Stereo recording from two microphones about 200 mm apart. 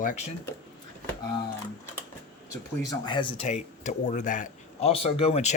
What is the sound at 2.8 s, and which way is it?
Speech, 20° left (ahead or behind).